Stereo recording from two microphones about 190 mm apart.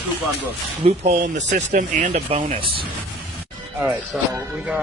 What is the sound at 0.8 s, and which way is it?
Speech, 35° right (ahead or behind).